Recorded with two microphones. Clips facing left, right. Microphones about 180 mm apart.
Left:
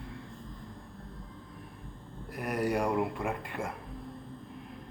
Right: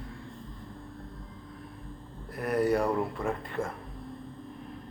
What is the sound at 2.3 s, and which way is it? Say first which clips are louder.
Speech: right 4 dB; 10° left (ahead or behind).